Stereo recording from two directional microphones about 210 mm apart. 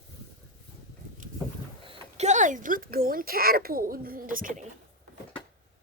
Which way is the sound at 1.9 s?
30° right (ahead or behind).